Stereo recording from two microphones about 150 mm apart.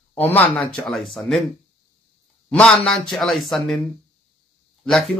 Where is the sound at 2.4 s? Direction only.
5° left (ahead or behind).